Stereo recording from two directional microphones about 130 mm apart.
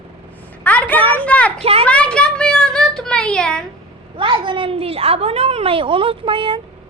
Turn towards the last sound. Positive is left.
turn(degrees=-40)  # may be behind; listen again after turning